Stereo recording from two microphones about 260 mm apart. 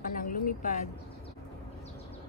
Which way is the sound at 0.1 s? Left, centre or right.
Left.